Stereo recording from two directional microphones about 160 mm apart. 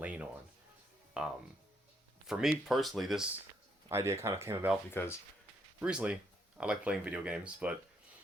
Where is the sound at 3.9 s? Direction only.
15° right (ahead or behind).